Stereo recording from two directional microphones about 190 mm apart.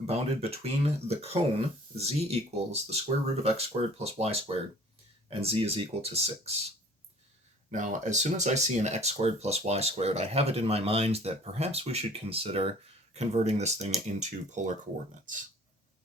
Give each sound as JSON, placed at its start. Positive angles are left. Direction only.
{"t": 0.1, "sound": "speech", "side_deg": -30}
{"t": 7.7, "sound": "speech", "side_deg": -40}